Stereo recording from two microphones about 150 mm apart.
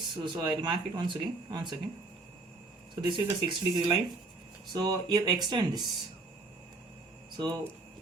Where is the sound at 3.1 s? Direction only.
35° right (ahead or behind).